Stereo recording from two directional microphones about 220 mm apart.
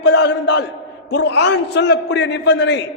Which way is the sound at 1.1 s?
50° left (ahead or behind).